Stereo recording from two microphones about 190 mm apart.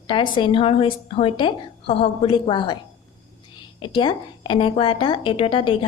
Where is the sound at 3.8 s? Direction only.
25° left (ahead or behind).